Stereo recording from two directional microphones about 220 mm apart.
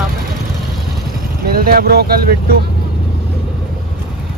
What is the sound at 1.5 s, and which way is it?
Speech, 40° right (ahead or behind).